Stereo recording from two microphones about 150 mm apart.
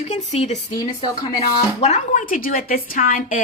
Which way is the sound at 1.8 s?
50° left (ahead or behind).